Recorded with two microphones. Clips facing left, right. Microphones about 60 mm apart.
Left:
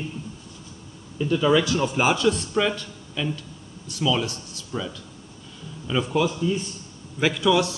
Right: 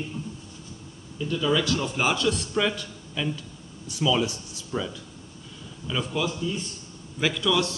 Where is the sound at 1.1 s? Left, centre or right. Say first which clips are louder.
Left 5 dB; left.